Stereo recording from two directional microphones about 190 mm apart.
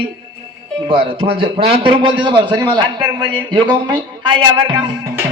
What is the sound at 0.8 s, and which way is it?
A man's voice, 30° right (ahead or behind).